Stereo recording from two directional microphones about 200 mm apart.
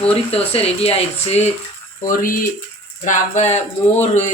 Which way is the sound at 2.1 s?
45° left (ahead or behind).